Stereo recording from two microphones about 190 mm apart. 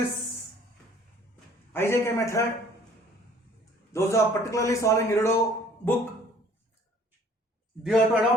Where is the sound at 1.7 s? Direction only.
15° left (ahead or behind).